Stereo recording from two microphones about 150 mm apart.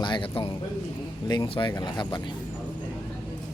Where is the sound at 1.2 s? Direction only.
25° left (ahead or behind).